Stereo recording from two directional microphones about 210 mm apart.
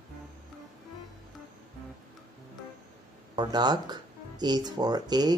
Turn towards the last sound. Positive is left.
turn(degrees=-20)  # may be behind; listen again after turning